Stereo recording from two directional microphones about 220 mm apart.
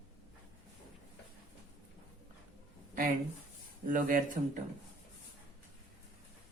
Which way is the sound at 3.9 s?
40° right (ahead or behind).